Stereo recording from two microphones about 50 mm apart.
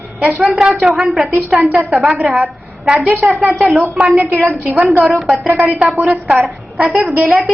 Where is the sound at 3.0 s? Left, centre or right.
Right.